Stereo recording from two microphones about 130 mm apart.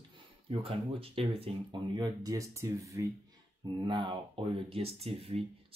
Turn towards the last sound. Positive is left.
turn(degrees=-50)  # may be behind; listen again after turning